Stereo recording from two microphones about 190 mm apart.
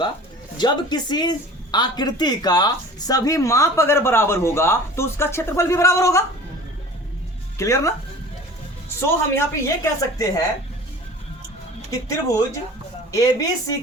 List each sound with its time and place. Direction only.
0.5 s speech: 20° left (ahead or behind)
7.6 s speech: 15° left (ahead or behind)
9.0 s speech: 15° left (ahead or behind)
11.9 s speech: 15° left (ahead or behind)